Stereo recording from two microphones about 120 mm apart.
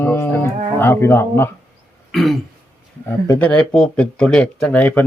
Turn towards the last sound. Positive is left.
turn(degrees=15)  # may be behind; listen again after turning